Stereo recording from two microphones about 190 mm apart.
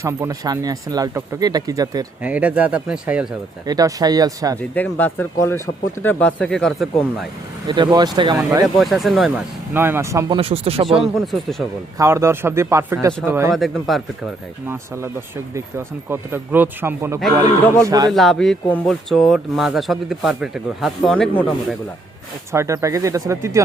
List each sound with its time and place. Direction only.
0.0 s speech: 15° right (ahead or behind)
2.2 s speech: 5° right (ahead or behind)
3.7 s speech: 20° right (ahead or behind)
4.7 s speech: 10° left (ahead or behind)
7.7 s speech: 25° right (ahead or behind)
8.6 s speech: centre (ahead or behind)
9.7 s speech: 10° right (ahead or behind)
10.3 s speech: 30° right (ahead or behind)
11.3 s speech: centre (ahead or behind)
11.9 s speech: 15° right (ahead or behind)
13.5 s speech: centre (ahead or behind)
14.7 s speech: 15° right (ahead or behind)
18.1 s speech: centre (ahead or behind)
22.5 s speech: 15° right (ahead or behind)